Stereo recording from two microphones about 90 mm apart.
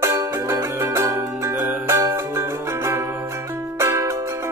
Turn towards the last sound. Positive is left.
turn(degrees=-35)  # may be behind; listen again after turning